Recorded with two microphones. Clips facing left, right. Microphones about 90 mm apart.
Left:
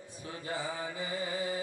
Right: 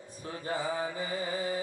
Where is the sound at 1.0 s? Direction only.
45° right (ahead or behind).